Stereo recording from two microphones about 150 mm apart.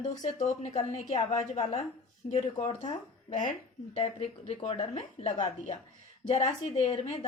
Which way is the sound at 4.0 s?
40° left (ahead or behind).